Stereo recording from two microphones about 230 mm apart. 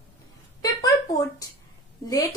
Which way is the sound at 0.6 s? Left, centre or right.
Centre.